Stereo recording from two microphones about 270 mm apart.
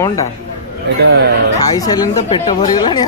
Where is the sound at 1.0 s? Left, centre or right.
Right.